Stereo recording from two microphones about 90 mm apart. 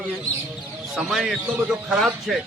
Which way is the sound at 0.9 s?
5° right (ahead or behind).